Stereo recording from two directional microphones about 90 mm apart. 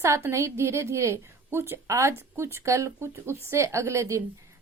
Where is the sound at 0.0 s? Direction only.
30° right (ahead or behind).